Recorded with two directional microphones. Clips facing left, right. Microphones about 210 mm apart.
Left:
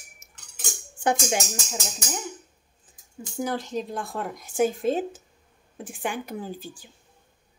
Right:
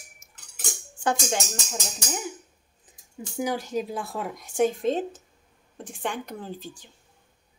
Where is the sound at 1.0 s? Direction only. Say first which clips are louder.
Left 2 dB; 15° left (ahead or behind).